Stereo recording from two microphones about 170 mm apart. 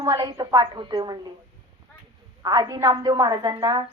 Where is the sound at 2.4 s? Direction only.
25° right (ahead or behind).